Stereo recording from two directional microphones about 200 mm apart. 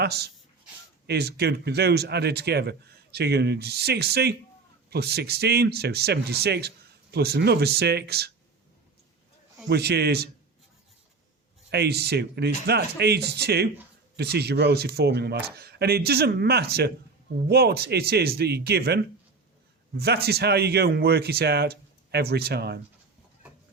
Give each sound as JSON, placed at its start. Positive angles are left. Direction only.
{"t": 0.0, "sound": "speech", "side_deg": -55}
{"t": 9.6, "sound": "speech", "side_deg": -55}
{"t": 11.7, "sound": "speech", "side_deg": -55}
{"t": 20.0, "sound": "speech", "side_deg": -50}